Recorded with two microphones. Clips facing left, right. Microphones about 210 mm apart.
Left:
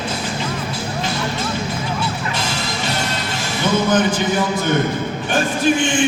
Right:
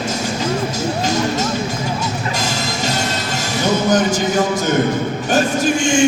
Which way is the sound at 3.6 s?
45° right (ahead or behind).